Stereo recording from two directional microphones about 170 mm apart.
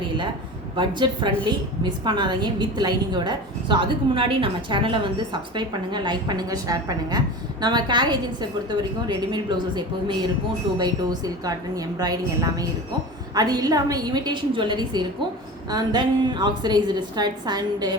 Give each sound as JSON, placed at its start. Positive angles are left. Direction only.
{"t": 0.8, "sound": "a woman's voice", "side_deg": -25}